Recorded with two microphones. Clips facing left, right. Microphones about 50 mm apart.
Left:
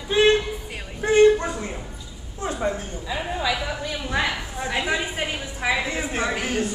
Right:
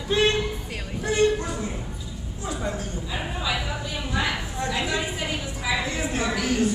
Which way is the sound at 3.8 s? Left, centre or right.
Left.